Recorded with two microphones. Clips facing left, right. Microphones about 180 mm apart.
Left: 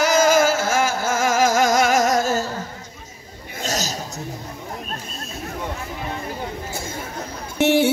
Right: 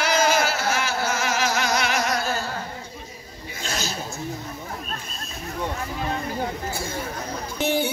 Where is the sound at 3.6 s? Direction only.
40° left (ahead or behind).